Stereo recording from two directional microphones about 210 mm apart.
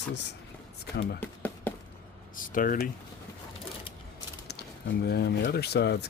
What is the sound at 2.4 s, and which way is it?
Speech, 40° left (ahead or behind).